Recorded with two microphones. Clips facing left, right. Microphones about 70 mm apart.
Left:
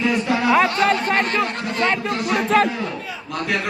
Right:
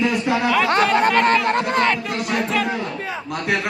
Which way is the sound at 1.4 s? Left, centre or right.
Right.